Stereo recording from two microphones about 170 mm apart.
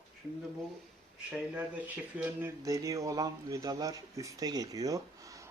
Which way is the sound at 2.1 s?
10° right (ahead or behind).